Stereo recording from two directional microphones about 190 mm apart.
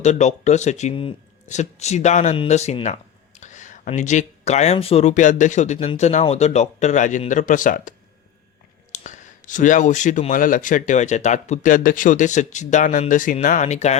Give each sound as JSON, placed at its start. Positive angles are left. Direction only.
{"t": 0.0, "sound": "speech", "side_deg": 35}